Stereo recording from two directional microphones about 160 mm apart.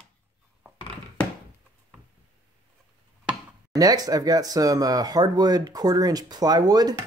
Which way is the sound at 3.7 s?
25° right (ahead or behind).